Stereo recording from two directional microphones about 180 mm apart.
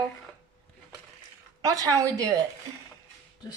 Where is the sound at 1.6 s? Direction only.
20° right (ahead or behind).